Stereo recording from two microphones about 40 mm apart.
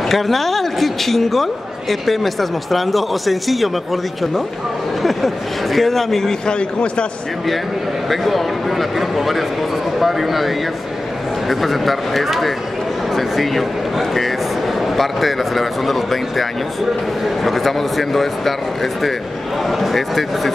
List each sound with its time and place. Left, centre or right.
0.1 s speech: centre
6.4 s a man's voice: left
8.1 s speech: centre